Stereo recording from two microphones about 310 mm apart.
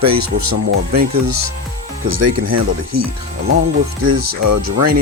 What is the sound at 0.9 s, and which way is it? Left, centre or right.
Speech, right.